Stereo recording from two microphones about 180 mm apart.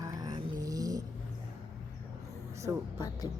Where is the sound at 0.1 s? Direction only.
20° right (ahead or behind).